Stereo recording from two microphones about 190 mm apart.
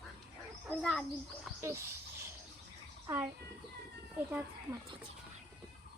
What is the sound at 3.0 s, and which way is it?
Speech, 15° right (ahead or behind).